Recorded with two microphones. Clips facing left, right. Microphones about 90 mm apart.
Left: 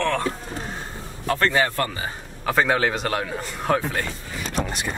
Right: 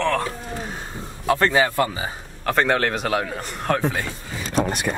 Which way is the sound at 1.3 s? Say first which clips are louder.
Right 2 dB; 15° right (ahead or behind).